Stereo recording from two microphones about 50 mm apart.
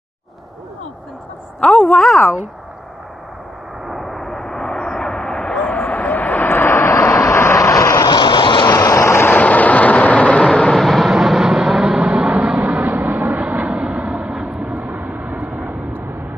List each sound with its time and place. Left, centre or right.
1.8 s a woman's voice: centre
3.8 s vehicle: centre
5.7 s vehicle: left
7.5 s vehicle: left
8.7 s vehicle: left
9.3 s vehicle: left
10.7 s vehicle: centre
12.0 s a sound: right
13.0 s vehicle: right